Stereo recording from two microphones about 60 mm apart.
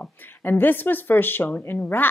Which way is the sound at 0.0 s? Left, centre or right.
Left.